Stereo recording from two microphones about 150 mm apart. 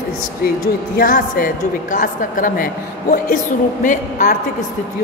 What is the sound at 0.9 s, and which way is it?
A woman's voice, 65° left (ahead or behind).